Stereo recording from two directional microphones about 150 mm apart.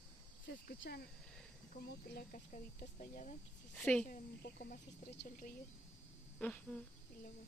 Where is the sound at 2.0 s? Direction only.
90° left.